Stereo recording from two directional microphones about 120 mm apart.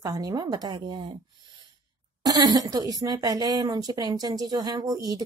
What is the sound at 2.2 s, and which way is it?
Speech, 30° right (ahead or behind).